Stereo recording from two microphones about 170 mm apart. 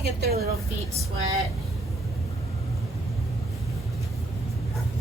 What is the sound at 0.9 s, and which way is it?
Speech, 20° right (ahead or behind).